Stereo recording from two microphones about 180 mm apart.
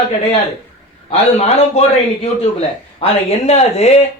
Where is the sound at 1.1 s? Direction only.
35° left (ahead or behind).